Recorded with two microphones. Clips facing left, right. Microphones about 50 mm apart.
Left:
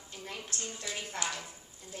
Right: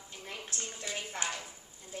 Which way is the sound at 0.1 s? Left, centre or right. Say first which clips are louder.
Left 1 dB; centre.